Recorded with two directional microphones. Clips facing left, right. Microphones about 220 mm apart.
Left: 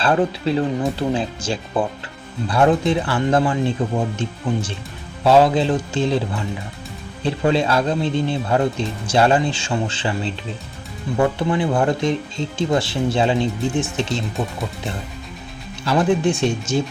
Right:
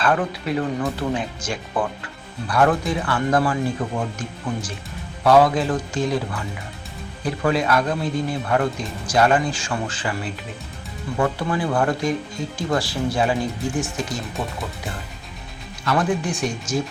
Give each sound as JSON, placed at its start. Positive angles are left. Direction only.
{"t": 0.0, "sound": "speech", "side_deg": 25}
{"t": 11.3, "sound": "speech", "side_deg": 20}
{"t": 15.8, "sound": "speech", "side_deg": 25}